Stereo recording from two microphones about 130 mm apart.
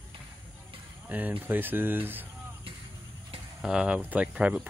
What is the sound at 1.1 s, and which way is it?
Speech, 15° right (ahead or behind).